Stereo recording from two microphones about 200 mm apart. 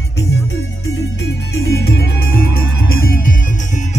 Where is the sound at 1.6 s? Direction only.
50° left (ahead or behind).